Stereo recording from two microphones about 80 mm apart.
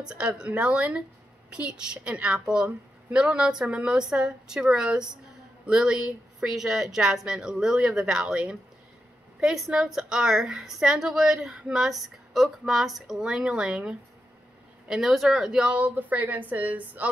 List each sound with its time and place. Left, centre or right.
0.0 s a woman's voice: centre